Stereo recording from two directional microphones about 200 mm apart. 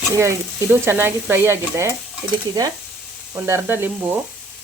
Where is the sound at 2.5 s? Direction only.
20° right (ahead or behind).